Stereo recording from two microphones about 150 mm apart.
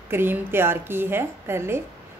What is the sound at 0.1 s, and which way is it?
A woman's voice, 15° right (ahead or behind).